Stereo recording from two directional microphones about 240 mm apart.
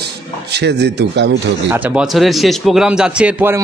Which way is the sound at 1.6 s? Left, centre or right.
Centre.